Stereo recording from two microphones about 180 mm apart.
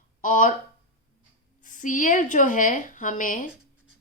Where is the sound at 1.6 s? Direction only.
45° left (ahead or behind).